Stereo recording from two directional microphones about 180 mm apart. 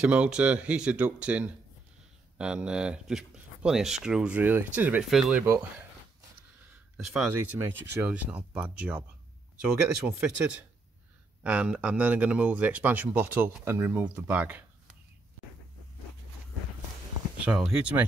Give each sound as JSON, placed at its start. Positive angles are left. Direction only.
{"t": 0.0, "sound": "speech", "side_deg": -5}
{"t": 7.0, "sound": "speech", "side_deg": -5}
{"t": 7.7, "sound": "speech", "side_deg": -70}
{"t": 8.0, "sound": "speech", "side_deg": -10}
{"t": 10.0, "sound": "speech", "side_deg": -5}
{"t": 17.5, "sound": "speech", "side_deg": -5}